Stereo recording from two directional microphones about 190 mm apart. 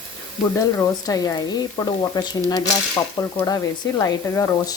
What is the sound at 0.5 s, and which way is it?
Speech, 20° left (ahead or behind).